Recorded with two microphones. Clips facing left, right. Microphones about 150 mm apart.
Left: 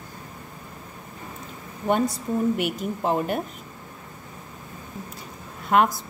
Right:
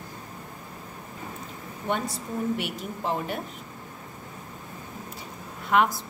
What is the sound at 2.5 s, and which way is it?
Speech, 50° left (ahead or behind).